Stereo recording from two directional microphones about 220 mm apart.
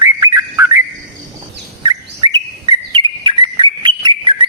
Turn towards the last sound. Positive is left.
turn(degrees=-20)  # may be behind; listen again after turning